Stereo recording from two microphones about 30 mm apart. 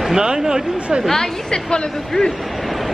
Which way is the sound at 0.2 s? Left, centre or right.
Right.